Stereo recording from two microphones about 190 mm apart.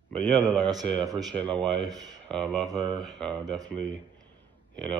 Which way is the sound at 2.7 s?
25° right (ahead or behind).